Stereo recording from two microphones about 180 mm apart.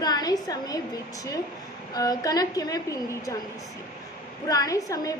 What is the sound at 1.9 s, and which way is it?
A woman's voice, 20° left (ahead or behind).